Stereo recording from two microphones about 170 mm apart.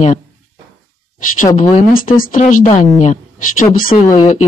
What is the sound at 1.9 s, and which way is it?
A woman's voice, 55° left (ahead or behind).